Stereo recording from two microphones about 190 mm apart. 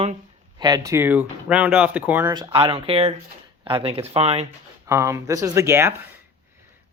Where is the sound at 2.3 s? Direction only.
20° right (ahead or behind).